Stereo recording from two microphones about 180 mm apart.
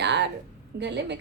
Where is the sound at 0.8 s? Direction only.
75° right (ahead or behind).